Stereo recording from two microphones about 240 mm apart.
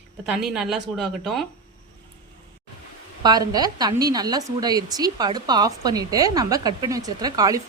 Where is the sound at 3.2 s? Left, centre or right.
Centre.